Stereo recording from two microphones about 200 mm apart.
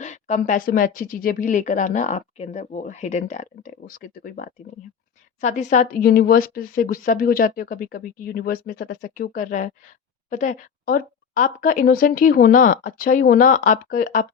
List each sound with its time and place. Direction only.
0.0 s a woman's voice: 35° left (ahead or behind)